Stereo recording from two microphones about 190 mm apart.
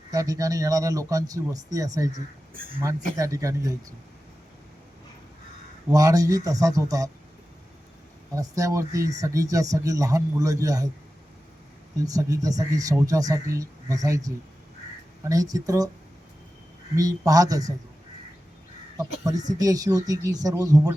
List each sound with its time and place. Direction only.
0.1 s speech: 20° right (ahead or behind)
2.5 s speech: 50° right (ahead or behind)
3.2 s speech: 15° right (ahead or behind)
5.9 s speech: 20° right (ahead or behind)
8.4 s speech: 15° right (ahead or behind)
11.9 s speech: 20° right (ahead or behind)
16.9 s speech: 20° right (ahead or behind)
18.9 s speech: 20° right (ahead or behind)